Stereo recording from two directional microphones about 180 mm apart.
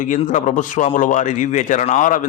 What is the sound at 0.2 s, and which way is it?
A man's voice, 45° left (ahead or behind).